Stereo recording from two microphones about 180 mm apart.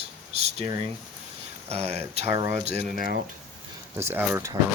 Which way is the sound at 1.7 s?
35° right (ahead or behind).